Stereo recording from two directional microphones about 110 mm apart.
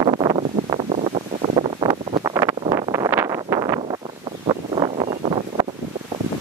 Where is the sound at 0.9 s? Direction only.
80° right.